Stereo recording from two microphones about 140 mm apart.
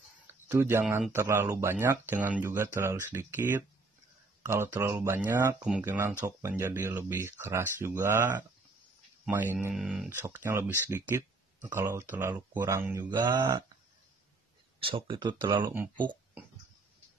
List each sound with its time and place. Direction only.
0.5 s speech: 20° right (ahead or behind)
9.8 s speech: centre (ahead or behind)
10.0 s speech: 20° right (ahead or behind)
13.4 s a sound: 30° right (ahead or behind)
14.8 s speech: 40° right (ahead or behind)
15.7 s speech: 15° right (ahead or behind)